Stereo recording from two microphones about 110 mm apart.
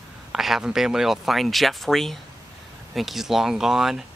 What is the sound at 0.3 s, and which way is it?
Speech, 5° right (ahead or behind).